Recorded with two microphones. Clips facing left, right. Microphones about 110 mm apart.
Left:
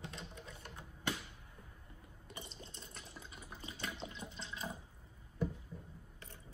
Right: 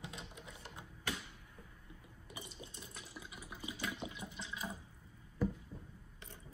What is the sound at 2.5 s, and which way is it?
Water, 10° right (ahead or behind).